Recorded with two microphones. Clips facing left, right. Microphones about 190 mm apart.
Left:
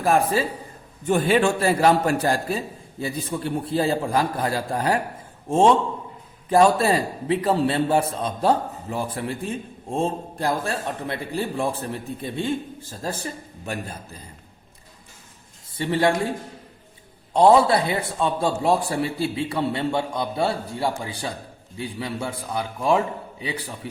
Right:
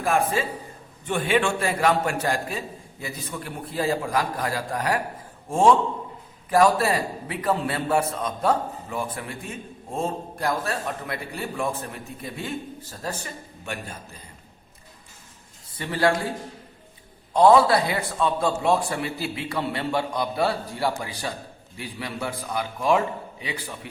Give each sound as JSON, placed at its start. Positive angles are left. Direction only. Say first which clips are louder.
{"t": 0.0, "sound": "a man's voice", "louder": "left 3 dB", "side_deg": 35}
{"t": 15.8, "sound": "a man's voice", "louder": "left 2 dB", "side_deg": 25}
{"t": 17.3, "sound": "a man's voice", "louder": "left 1 dB", "side_deg": 30}